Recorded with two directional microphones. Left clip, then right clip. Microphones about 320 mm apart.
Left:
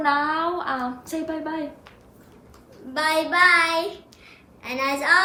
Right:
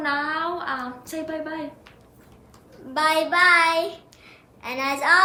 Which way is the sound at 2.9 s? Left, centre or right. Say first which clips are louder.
Right 1 dB; centre.